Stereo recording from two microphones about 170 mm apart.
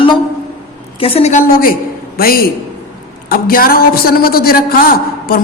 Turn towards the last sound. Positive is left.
turn(degrees=60)  # may be behind; listen again after turning